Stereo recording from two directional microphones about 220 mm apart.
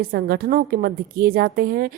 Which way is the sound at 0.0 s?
45° right (ahead or behind).